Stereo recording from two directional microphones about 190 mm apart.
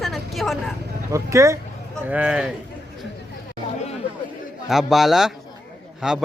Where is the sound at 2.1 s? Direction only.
5° right (ahead or behind).